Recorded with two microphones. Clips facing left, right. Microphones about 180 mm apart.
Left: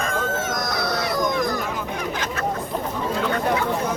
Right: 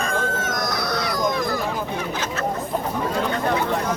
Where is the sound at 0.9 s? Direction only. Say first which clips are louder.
Left 1 dB; 25° left (ahead or behind).